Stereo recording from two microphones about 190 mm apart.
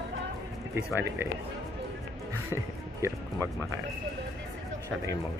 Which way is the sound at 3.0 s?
15° right (ahead or behind).